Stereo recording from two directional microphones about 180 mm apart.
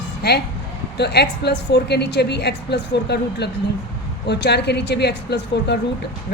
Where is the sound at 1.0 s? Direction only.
70° left (ahead or behind).